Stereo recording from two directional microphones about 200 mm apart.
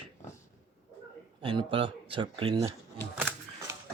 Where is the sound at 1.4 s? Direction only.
25° right (ahead or behind).